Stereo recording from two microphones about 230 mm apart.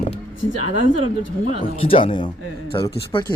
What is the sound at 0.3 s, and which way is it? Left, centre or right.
Speech, left.